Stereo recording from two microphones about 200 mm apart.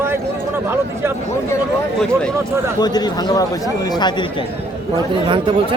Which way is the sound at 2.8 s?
20° left (ahead or behind).